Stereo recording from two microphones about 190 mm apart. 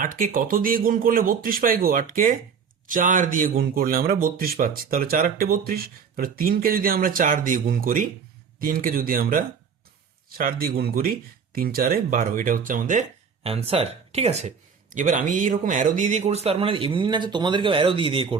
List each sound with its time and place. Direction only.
0.0 s a man's voice: 45° right (ahead or behind); by 18.3 s 25° right (ahead or behind)